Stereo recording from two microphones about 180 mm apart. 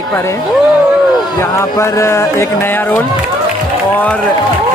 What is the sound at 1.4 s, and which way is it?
Speech, 15° left (ahead or behind).